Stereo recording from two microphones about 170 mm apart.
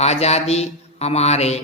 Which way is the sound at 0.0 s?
40° left (ahead or behind).